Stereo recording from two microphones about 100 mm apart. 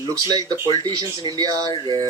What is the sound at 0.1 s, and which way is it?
Speech, 35° right (ahead or behind).